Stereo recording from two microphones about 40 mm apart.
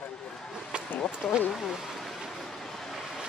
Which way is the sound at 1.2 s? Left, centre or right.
Centre.